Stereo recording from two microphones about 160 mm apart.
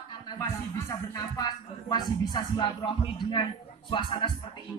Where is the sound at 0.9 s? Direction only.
25° left (ahead or behind).